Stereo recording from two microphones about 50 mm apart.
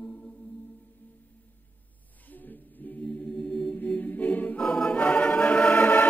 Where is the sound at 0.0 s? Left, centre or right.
Left.